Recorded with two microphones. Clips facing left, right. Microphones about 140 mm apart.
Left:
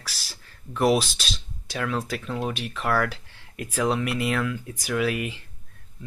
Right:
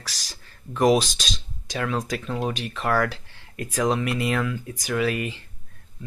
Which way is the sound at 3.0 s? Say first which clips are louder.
Right 2 dB; 5° left (ahead or behind).